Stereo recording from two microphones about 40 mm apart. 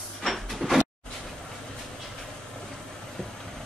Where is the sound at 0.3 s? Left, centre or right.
Centre.